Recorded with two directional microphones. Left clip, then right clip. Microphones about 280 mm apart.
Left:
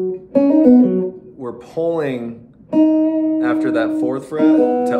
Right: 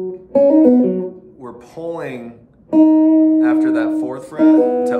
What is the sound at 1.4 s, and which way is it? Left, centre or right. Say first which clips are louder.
Speech: left 7 dB; centre.